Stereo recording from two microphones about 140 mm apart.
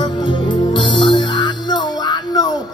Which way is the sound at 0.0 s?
35° left (ahead or behind).